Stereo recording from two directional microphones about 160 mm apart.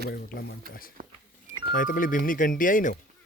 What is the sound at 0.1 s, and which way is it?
Speech, 75° left (ahead or behind).